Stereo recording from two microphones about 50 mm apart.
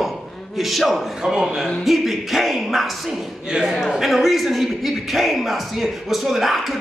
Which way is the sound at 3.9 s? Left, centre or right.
Centre.